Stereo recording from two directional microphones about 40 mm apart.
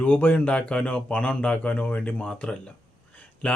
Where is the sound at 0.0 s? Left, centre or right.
Left.